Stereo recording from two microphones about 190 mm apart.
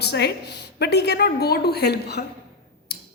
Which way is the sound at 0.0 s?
60° left (ahead or behind).